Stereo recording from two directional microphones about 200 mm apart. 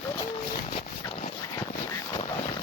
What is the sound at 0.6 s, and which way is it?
Dog, 35° left (ahead or behind).